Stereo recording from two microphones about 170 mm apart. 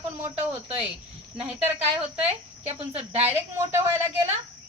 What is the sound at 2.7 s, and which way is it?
Speech, 40° right (ahead or behind).